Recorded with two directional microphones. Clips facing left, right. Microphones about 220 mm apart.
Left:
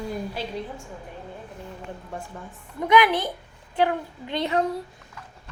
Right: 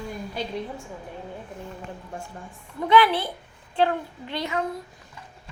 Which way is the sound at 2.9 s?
15° left (ahead or behind).